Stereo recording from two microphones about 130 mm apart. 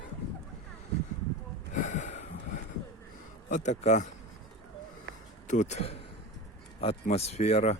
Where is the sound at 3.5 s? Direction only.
65° left (ahead or behind).